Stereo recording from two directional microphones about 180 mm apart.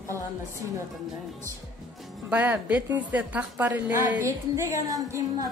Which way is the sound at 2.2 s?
10° right (ahead or behind).